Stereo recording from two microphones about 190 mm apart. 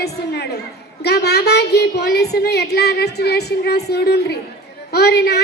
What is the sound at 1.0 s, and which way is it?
A woman's voice, 60° left (ahead or behind).